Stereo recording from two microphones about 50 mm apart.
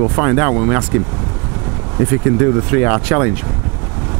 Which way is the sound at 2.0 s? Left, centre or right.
Right.